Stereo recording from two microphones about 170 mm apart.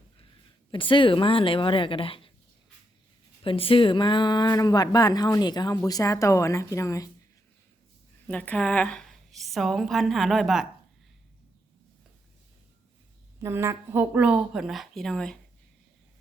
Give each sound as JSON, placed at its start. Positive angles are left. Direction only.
{"t": 0.7, "sound": "speech", "side_deg": 30}
{"t": 3.4, "sound": "speech", "side_deg": 30}
{"t": 8.3, "sound": "a woman's voice", "side_deg": 5}
{"t": 13.4, "sound": "speech", "side_deg": -15}